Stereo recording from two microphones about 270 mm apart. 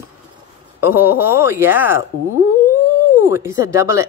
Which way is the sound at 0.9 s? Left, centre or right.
Centre.